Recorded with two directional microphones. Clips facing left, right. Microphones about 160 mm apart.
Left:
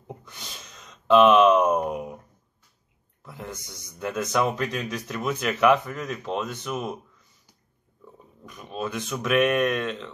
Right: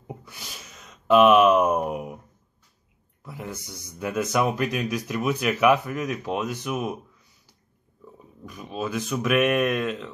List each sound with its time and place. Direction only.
0.0 s a sound: 5° right (ahead or behind)
3.2 s speech: 10° right (ahead or behind)
8.0 s speech: centre (ahead or behind)